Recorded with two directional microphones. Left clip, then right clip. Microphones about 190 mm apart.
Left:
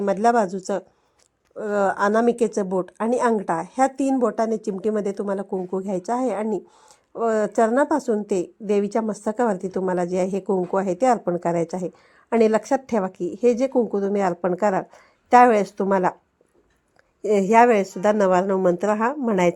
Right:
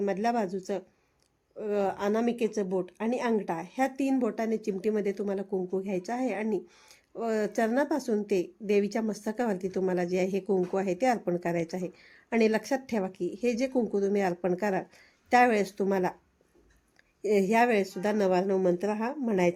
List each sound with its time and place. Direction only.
0.0 s a woman's voice: 30° left (ahead or behind)
17.2 s a woman's voice: 20° left (ahead or behind)